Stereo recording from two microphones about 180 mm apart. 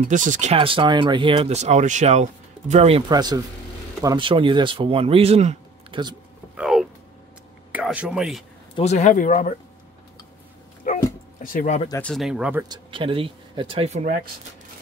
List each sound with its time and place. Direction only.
0.1 s speech: 45° right (ahead or behind)
3.1 s speech: 20° right (ahead or behind)
6.5 s a sound: 5° right (ahead or behind)
7.7 s speech: 5° right (ahead or behind)
8.7 s speech: 40° left (ahead or behind)
10.9 s dog: 45° left (ahead or behind)
11.4 s speech: 45° left (ahead or behind)
12.0 s speech: centre (ahead or behind)
12.6 s speech: 25° right (ahead or behind); by 14.2 s 45° right (ahead or behind)